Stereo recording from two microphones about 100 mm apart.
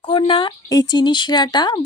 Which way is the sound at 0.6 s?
40° left (ahead or behind).